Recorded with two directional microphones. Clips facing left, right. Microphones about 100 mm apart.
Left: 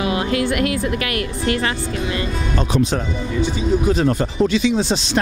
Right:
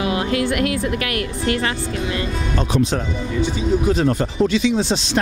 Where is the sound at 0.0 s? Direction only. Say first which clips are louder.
Even; 15° left (ahead or behind).